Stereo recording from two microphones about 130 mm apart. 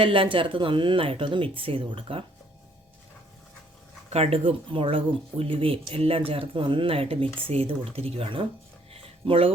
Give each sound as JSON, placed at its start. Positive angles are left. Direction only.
{"t": 0.0, "sound": "speech", "side_deg": -40}
{"t": 4.1, "sound": "speech", "side_deg": -50}
{"t": 8.9, "sound": "a sound", "side_deg": -45}